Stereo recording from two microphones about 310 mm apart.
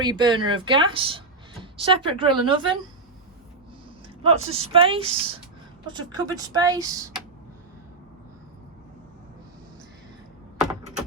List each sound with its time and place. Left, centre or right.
0.0 s speech: centre
4.2 s speech: centre